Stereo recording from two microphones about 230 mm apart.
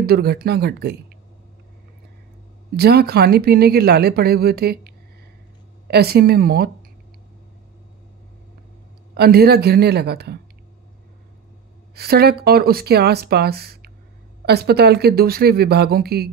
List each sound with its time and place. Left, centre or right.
0.0 s speech: right
2.7 s speech: right
9.1 s speech: right
11.9 s speech: right